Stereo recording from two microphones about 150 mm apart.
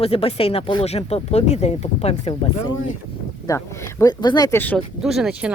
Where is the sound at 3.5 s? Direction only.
20° left (ahead or behind).